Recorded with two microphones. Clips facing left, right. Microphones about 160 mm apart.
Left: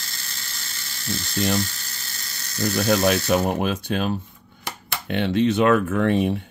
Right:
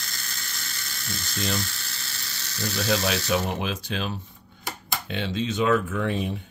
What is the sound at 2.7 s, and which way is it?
Speech, 55° left (ahead or behind).